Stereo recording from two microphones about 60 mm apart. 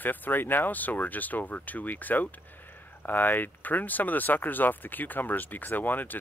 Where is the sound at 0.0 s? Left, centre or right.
Left.